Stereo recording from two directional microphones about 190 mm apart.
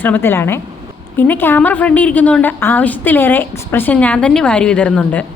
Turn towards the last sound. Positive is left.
turn(degrees=5)  # may be behind; listen again after turning